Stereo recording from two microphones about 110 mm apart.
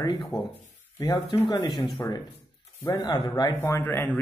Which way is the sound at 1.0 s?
35° left (ahead or behind).